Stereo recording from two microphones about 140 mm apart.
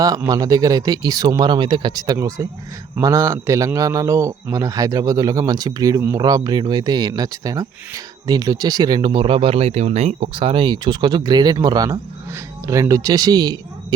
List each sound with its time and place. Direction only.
0.3 s a man's voice: 25° right (ahead or behind)